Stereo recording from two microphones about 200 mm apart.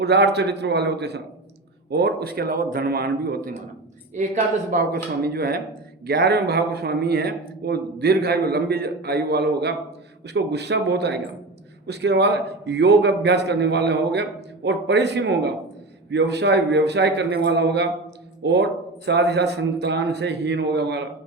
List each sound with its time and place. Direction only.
0.0 s a man's voice: 55° right (ahead or behind)
4.2 s speech: 35° right (ahead or behind)
4.7 s a man's voice: 50° right (ahead or behind)